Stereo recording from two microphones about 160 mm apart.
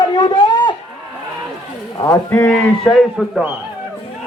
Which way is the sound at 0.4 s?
30° left (ahead or behind).